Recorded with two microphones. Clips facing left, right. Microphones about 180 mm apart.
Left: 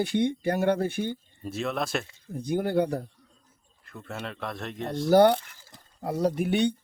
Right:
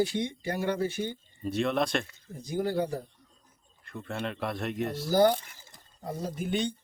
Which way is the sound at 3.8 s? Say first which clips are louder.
Right 2 dB; centre (ahead or behind).